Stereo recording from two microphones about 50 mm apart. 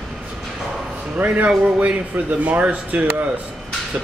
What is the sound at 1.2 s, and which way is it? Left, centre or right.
Speech, right.